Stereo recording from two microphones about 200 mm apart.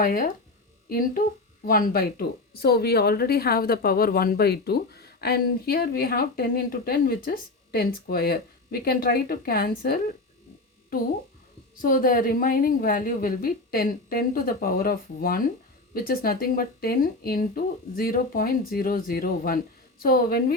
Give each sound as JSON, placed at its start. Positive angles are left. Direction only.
{"t": 0.0, "sound": "speech", "side_deg": 45}
{"t": 11.8, "sound": "speech", "side_deg": 45}